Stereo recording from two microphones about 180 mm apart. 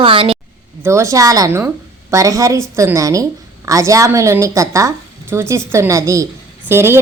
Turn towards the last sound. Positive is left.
turn(degrees=-15)  # may be behind; listen again after turning